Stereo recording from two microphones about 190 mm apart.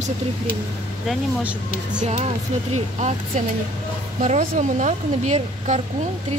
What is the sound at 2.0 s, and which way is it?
Speech, 40° right (ahead or behind).